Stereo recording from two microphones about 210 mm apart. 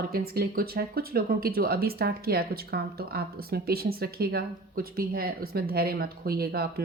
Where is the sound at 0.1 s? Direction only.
45° right (ahead or behind).